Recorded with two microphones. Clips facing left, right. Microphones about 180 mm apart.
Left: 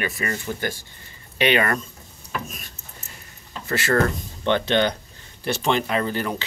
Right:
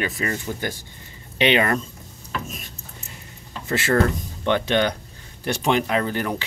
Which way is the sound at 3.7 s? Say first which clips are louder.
Right 1 dB; 15° right (ahead or behind).